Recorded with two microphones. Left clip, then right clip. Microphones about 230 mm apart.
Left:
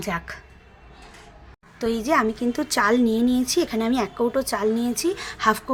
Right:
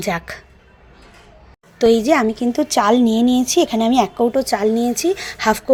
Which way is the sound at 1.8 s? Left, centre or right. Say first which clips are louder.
Right 8 dB; right.